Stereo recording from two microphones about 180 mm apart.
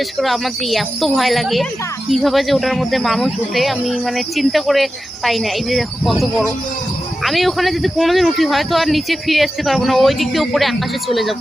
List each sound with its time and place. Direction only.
0.2 s speech: centre (ahead or behind)